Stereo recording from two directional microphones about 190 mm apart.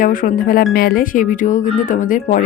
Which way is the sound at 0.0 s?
45° left (ahead or behind).